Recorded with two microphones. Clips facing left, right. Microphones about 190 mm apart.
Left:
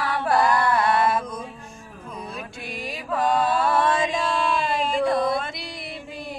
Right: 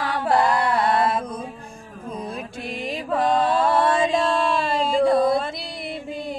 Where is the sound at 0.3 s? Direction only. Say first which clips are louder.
Right 1 dB; 25° right (ahead or behind).